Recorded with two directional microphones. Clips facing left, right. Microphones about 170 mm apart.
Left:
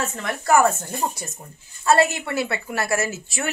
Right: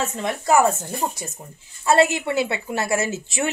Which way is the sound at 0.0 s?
20° right (ahead or behind).